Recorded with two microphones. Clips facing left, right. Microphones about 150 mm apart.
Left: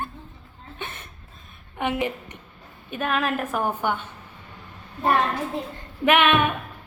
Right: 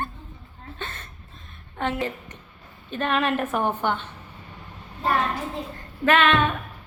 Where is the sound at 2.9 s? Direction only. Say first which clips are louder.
Right 1 dB; 5° left (ahead or behind).